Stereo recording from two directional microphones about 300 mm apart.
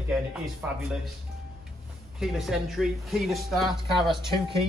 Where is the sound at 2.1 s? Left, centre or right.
Centre.